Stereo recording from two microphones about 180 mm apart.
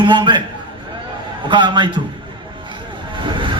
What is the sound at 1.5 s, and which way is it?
Speech, 25° right (ahead or behind).